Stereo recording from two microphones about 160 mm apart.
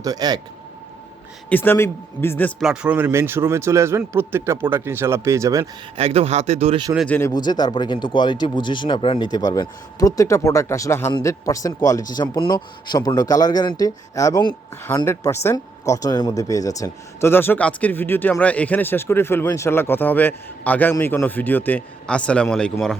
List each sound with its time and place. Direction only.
0.0 s speech: 25° right (ahead or behind)
1.5 s a man's voice: 10° left (ahead or behind)
2.6 s speech: 5° right (ahead or behind)
6.0 s speech: 40° right (ahead or behind)
7.1 s a man's voice: 15° left (ahead or behind)